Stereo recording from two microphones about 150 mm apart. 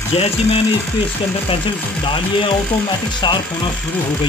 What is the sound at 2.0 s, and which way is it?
Speech, 35° left (ahead or behind).